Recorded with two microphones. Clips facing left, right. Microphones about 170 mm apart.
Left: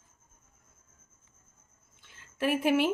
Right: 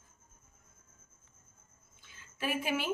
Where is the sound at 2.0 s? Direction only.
65° left (ahead or behind).